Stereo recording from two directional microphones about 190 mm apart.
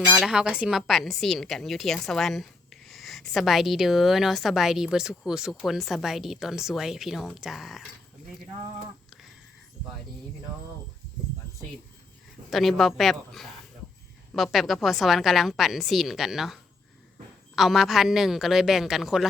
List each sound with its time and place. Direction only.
0.1 s a woman's voice: centre (ahead or behind)
12.5 s a woman's voice: centre (ahead or behind)